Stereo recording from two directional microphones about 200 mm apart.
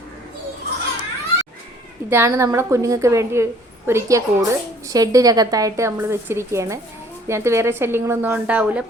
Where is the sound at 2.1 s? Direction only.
10° right (ahead or behind).